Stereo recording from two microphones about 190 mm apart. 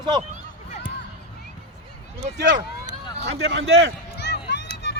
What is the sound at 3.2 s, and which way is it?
Speech, 65° right (ahead or behind).